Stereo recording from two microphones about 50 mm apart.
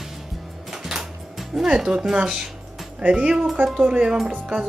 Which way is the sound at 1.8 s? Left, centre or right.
Centre.